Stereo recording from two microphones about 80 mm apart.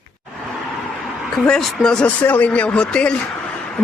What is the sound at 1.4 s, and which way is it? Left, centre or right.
Speech, centre.